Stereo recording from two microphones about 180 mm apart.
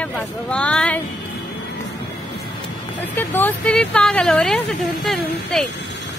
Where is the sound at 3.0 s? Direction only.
10° left (ahead or behind).